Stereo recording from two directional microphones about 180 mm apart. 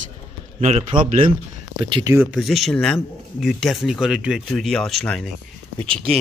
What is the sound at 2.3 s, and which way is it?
Speech, centre (ahead or behind).